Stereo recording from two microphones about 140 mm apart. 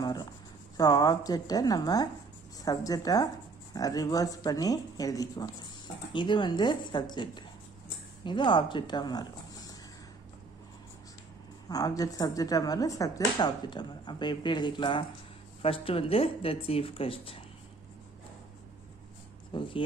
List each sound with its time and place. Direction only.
0.0 s writing: 25° left (ahead or behind)
0.7 s speech: 25° left (ahead or behind)
11.7 s speech: 25° left (ahead or behind); by 17.4 s 40° left (ahead or behind)
19.5 s speech: 35° left (ahead or behind)